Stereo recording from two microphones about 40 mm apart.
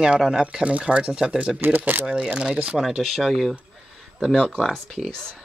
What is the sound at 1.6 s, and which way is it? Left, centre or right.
Speech, right.